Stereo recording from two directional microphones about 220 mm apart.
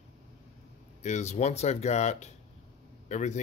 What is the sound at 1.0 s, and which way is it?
Speech, 30° left (ahead or behind).